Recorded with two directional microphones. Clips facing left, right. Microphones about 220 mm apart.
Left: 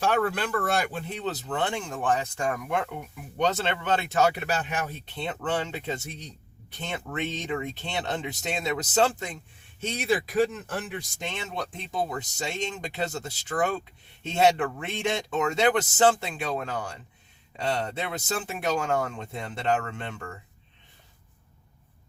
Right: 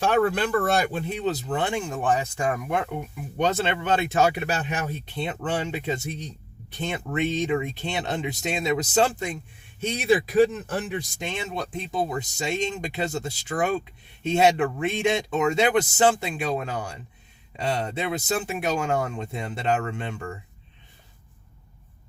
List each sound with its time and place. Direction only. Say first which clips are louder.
0.0 s speech: right 4 dB; 25° right (ahead or behind)
0.6 s speech: right 4 dB; 40° right (ahead or behind)
1.1 s speech: right 4 dB; 10° right (ahead or behind)